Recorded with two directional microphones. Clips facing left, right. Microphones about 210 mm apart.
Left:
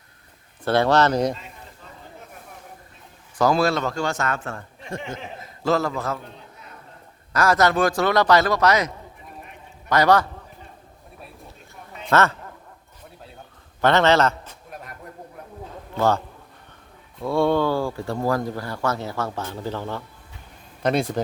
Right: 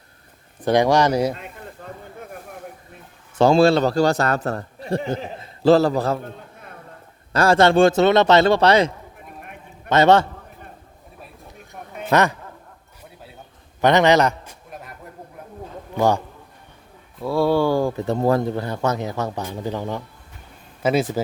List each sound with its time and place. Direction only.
0.6 s speech: 15° right (ahead or behind)
1.8 s a sound: 50° right (ahead or behind)
3.3 s a man's voice: 25° right (ahead or behind)
6.2 s a sound: 55° right (ahead or behind)
7.3 s a man's voice: 30° right (ahead or behind)
9.4 s a sound: 55° right (ahead or behind)
9.9 s a man's voice: 25° right (ahead or behind)
12.1 s speech: 15° right (ahead or behind)
13.8 s speech: 15° right (ahead or behind)
14.7 s a sound: centre (ahead or behind)
16.0 s speech: 15° right (ahead or behind)
17.2 s speech: centre (ahead or behind)
20.8 s speech: 5° right (ahead or behind)